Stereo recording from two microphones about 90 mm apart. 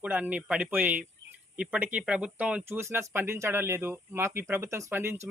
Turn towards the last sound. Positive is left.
turn(degrees=-25)  # may be behind; listen again after turning